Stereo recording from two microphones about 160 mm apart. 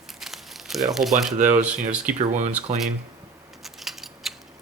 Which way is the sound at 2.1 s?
45° right (ahead or behind).